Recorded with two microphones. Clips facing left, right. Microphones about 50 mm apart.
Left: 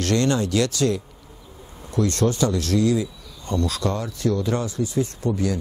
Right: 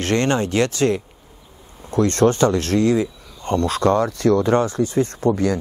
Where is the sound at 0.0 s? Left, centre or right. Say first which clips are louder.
Right 2 dB; right.